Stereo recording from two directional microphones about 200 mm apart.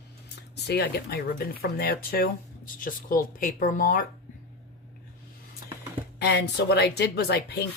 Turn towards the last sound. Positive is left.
turn(degrees=55)  # may be behind; listen again after turning